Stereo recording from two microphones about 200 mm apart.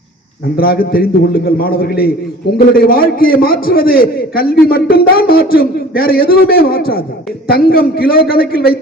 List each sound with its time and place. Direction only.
0.5 s a man's voice: 50° left (ahead or behind)